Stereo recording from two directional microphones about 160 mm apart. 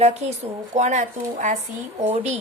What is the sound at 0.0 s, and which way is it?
A woman's voice, 40° right (ahead or behind).